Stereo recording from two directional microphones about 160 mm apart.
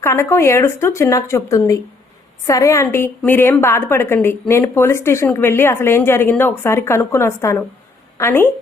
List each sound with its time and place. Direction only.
0.0 s a woman's voice: 15° left (ahead or behind)